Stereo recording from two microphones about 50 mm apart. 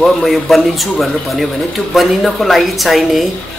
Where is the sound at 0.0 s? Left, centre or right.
Centre.